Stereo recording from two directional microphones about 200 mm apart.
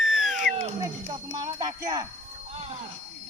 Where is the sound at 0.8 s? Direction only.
20° right (ahead or behind).